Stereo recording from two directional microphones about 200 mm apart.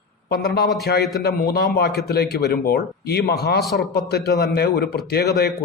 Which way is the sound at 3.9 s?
55° left (ahead or behind).